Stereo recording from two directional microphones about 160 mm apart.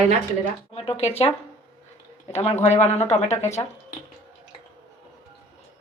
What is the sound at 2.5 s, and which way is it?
Speech, 15° left (ahead or behind).